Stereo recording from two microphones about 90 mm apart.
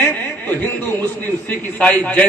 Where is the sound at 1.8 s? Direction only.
15° left (ahead or behind).